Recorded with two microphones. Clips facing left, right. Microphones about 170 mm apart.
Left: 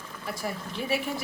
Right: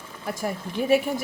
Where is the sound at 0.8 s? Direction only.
45° right (ahead or behind).